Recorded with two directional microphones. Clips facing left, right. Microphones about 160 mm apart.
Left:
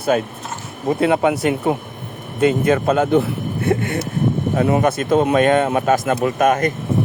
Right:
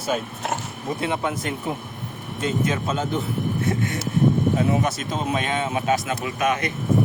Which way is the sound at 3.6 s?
60° left (ahead or behind).